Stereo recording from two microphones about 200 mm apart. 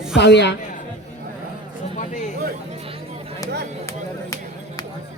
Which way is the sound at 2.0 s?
35° left (ahead or behind).